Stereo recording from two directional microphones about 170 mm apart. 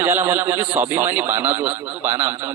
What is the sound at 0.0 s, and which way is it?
A man's voice, 10° right (ahead or behind).